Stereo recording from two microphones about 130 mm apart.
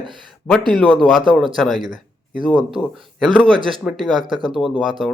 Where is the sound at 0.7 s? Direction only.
5° left (ahead or behind).